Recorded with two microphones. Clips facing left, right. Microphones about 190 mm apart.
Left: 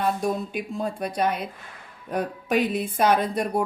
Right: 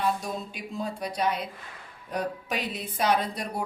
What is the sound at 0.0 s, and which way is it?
A woman's voice, 55° left (ahead or behind).